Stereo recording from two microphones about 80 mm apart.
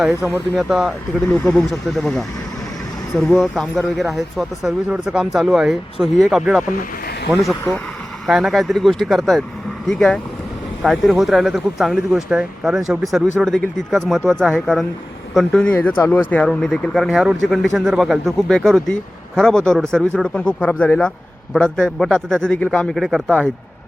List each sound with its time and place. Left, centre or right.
0.0 s speech: centre
8.3 s a man's voice: centre
17.1 s speech: centre
17.4 s a man's voice: centre
23.0 s speech: centre